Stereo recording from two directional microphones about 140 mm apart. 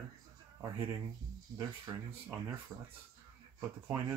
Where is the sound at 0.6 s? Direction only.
25° right (ahead or behind).